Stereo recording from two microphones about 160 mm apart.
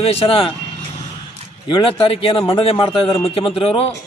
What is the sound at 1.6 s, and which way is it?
A man's voice, 35° left (ahead or behind).